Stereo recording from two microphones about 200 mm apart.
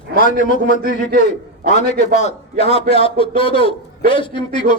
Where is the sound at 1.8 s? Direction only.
50° right (ahead or behind).